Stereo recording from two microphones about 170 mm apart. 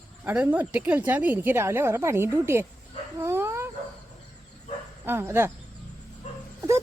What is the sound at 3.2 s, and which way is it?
Dog, 15° right (ahead or behind).